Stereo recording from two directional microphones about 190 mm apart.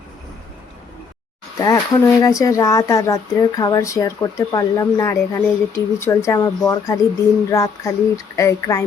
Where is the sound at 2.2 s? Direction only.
15° left (ahead or behind).